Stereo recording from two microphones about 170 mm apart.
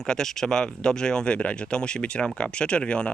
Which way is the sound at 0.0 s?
5° left (ahead or behind).